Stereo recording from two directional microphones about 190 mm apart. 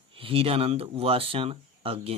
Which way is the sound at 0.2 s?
30° right (ahead or behind).